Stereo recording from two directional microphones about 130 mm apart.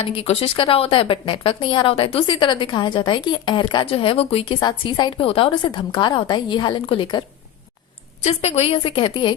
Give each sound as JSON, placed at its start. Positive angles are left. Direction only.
{"t": 0.0, "sound": "speech", "side_deg": 45}
{"t": 4.6, "sound": "a woman's voice", "side_deg": 35}
{"t": 5.6, "sound": "speech", "side_deg": 35}
{"t": 8.2, "sound": "a woman's voice", "side_deg": 55}